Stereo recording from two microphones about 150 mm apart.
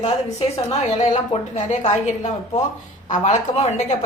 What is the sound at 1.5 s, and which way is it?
A woman's voice, 50° left (ahead or behind).